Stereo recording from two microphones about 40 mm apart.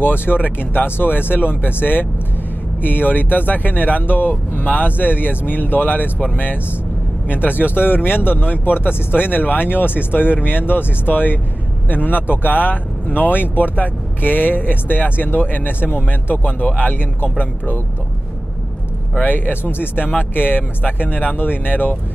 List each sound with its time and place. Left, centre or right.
0.0 s speech: left
19.1 s speech: left